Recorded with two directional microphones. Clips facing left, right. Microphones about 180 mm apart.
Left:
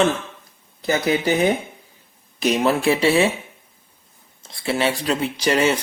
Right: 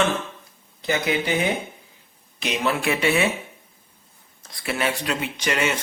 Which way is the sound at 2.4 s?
40° left (ahead or behind).